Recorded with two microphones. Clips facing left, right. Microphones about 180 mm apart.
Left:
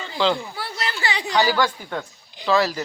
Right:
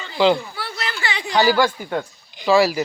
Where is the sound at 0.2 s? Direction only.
10° right (ahead or behind).